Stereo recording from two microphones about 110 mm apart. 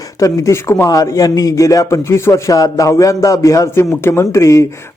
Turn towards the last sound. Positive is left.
turn(degrees=30)  # may be behind; listen again after turning